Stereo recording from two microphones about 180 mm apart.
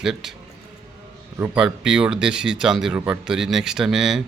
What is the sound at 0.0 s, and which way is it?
Speech, centre (ahead or behind).